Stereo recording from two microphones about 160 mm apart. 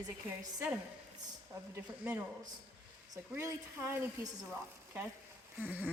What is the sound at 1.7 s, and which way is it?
Speech, 15° right (ahead or behind).